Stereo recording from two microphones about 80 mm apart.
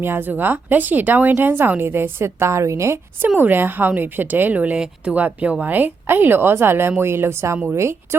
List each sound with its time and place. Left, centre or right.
0.0 s a woman's voice: right
3.2 s a woman's voice: right